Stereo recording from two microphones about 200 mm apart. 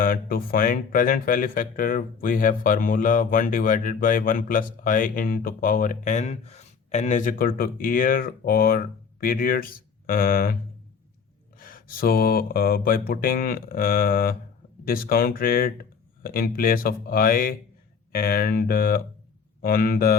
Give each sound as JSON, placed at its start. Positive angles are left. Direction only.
{"t": 0.0, "sound": "speech", "side_deg": 45}
{"t": 11.5, "sound": "speech", "side_deg": 45}